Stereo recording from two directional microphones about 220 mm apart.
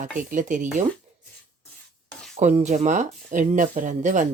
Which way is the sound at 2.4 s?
30° right (ahead or behind).